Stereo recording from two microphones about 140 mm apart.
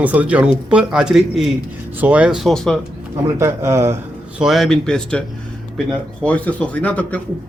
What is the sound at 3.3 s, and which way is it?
Speech, 20° right (ahead or behind).